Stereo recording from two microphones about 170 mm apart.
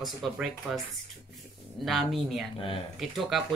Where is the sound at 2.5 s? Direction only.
30° left (ahead or behind).